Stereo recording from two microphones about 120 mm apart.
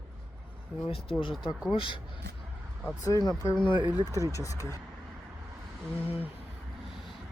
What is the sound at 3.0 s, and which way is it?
Speech, 30° left (ahead or behind).